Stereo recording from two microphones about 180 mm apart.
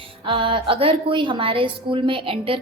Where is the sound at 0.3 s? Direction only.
30° right (ahead or behind).